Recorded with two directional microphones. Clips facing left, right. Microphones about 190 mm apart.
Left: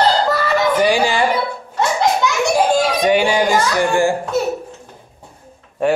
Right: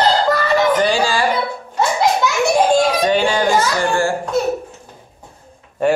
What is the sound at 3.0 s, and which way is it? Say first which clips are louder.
Speech: left 1 dB; 15° left (ahead or behind).